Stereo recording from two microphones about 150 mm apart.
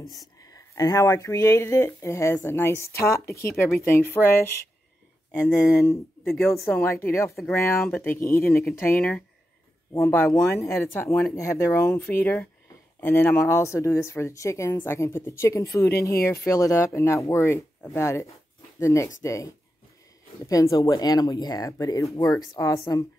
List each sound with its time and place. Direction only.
0.4 s speech: 25° left (ahead or behind)
5.7 s speech: 20° left (ahead or behind)
9.9 s speech: 15° left (ahead or behind)